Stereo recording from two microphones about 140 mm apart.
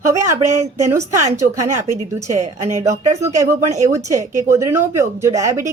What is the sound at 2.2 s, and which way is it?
Speech, 55° right (ahead or behind).